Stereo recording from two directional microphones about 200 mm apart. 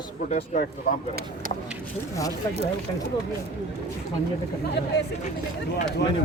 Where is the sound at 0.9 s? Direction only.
45° left (ahead or behind).